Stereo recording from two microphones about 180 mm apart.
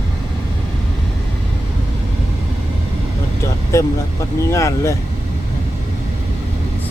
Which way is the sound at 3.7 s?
15° left (ahead or behind).